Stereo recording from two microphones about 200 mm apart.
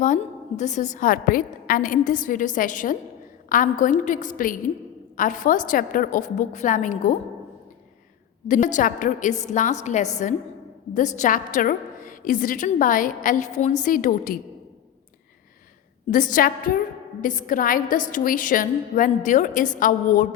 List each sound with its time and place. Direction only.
0.0 s a woman's voice: 40° left (ahead or behind)
8.4 s a woman's voice: 40° left (ahead or behind)
16.0 s a woman's voice: 40° left (ahead or behind)